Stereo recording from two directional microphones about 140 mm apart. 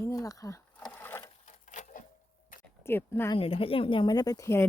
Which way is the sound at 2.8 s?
15° left (ahead or behind).